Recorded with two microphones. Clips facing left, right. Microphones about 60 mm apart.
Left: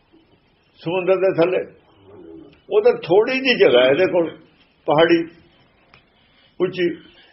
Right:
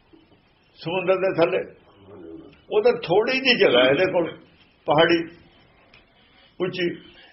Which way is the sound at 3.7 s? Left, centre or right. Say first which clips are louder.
Left 4 dB; left.